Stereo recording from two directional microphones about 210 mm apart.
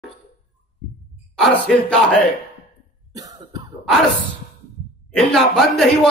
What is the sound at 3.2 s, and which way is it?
Cough, 20° right (ahead or behind).